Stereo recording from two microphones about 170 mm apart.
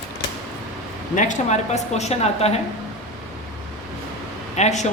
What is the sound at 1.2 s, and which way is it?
A woman's voice, 45° left (ahead or behind).